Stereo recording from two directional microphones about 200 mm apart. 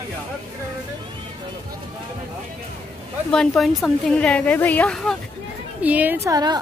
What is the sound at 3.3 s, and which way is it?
A woman's voice, centre (ahead or behind).